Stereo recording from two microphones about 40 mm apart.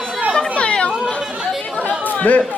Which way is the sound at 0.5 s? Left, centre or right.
Left.